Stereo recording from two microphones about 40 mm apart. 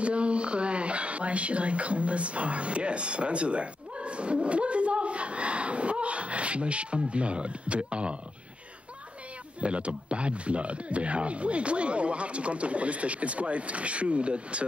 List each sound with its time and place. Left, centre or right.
0.0 s speech: right
9.6 s speech: right